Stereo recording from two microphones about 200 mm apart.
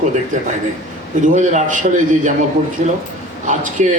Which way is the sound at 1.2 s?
40° right (ahead or behind).